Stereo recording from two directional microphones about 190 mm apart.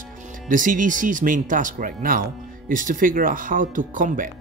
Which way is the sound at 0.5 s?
45° right (ahead or behind).